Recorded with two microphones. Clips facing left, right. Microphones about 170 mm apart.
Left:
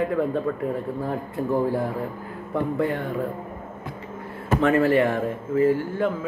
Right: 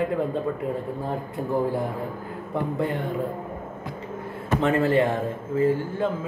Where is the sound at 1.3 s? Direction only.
15° right (ahead or behind).